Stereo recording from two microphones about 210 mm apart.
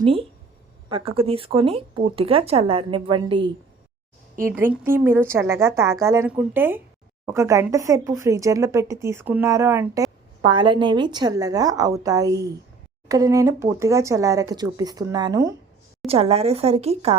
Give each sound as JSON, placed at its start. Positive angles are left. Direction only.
{"t": 0.0, "sound": "speech", "side_deg": -25}
{"t": 4.4, "sound": "speech", "side_deg": -10}
{"t": 16.0, "sound": "speech", "side_deg": -30}